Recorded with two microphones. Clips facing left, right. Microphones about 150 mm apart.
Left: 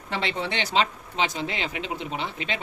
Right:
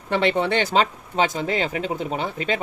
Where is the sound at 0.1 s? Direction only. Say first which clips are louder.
Right 8 dB; 55° right (ahead or behind).